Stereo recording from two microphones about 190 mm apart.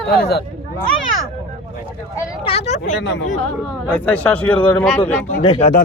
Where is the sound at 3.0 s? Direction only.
70° left (ahead or behind).